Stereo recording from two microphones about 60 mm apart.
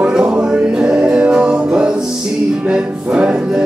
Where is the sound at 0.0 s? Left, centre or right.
Centre.